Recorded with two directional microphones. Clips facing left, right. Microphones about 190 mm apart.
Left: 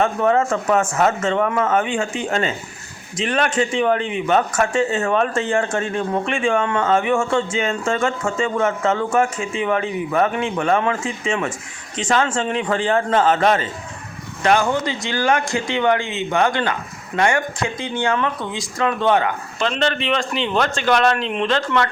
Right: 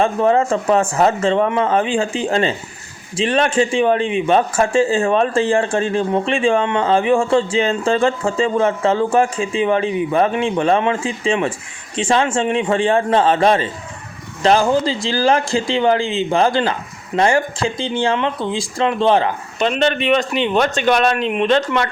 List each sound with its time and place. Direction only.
0.0 s speech: 30° right (ahead or behind)
19.6 s speech: 20° right (ahead or behind)